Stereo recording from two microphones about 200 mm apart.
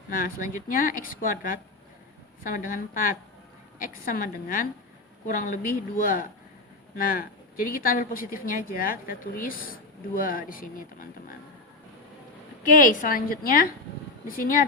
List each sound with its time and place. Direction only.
0.1 s a woman's voice: 45° left (ahead or behind)
12.6 s speech: 40° left (ahead or behind)